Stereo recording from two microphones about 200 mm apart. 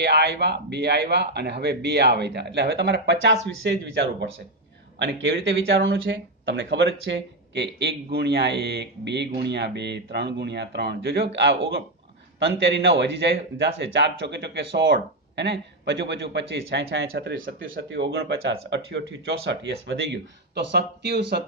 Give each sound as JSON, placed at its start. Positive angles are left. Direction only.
{"t": 0.0, "sound": "speech", "side_deg": -60}
{"t": 12.5, "sound": "speech", "side_deg": -60}